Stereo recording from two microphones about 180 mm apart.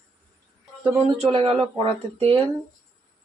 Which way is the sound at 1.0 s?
30° right (ahead or behind).